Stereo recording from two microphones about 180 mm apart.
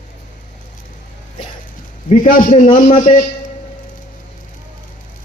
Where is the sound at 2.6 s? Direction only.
30° left (ahead or behind).